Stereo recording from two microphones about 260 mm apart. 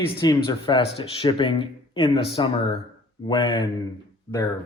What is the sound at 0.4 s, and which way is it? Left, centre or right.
Speech, centre.